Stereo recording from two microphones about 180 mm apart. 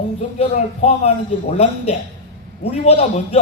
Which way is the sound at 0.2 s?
35° left (ahead or behind).